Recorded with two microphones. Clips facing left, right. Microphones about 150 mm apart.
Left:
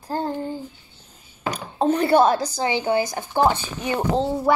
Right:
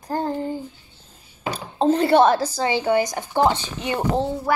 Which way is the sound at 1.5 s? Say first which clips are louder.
Right 2 dB; 30° right (ahead or behind).